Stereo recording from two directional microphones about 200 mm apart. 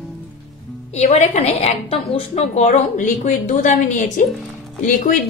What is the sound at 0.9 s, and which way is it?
A woman's voice, 35° left (ahead or behind).